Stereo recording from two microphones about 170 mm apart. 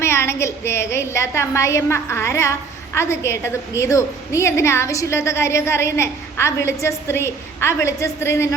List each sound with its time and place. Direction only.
0.0 s a woman's voice: 15° left (ahead or behind)